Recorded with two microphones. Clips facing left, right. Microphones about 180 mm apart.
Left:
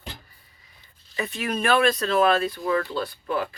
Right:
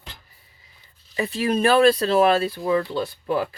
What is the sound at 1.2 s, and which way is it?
Speech, 30° right (ahead or behind).